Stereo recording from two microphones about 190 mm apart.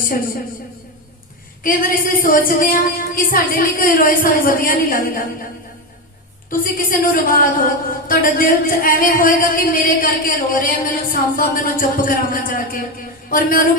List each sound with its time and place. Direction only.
1.6 s speech: 50° left (ahead or behind)
6.5 s speech: 45° left (ahead or behind)